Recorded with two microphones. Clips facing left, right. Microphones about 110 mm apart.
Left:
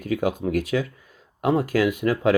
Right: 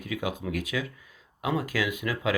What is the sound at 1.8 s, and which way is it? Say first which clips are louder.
Speech: left 8 dB; 55° left (ahead or behind).